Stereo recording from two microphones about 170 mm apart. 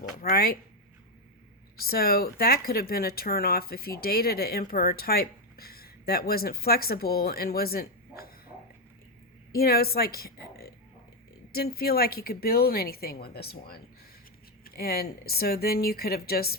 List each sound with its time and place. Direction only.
0.2 s speech: 60° left (ahead or behind)
1.7 s speech: 65° left (ahead or behind)
9.5 s a woman's voice: 60° left (ahead or behind)